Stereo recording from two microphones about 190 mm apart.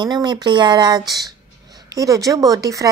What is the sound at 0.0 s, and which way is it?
Speech, 25° right (ahead or behind).